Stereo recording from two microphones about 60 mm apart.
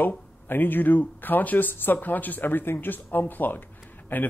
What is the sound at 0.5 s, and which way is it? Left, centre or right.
A man's voice, left.